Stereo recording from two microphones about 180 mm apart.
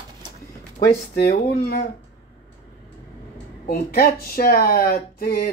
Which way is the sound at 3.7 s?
55° left (ahead or behind).